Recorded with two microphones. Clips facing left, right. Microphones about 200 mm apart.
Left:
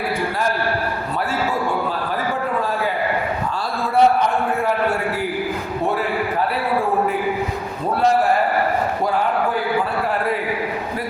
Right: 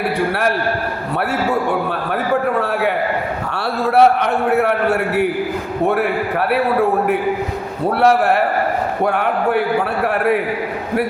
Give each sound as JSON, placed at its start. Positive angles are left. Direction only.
{"t": 2.3, "sound": "a sound", "side_deg": -65}
{"t": 3.5, "sound": "a man's voice", "side_deg": -70}
{"t": 8.0, "sound": "a man's voice", "side_deg": -70}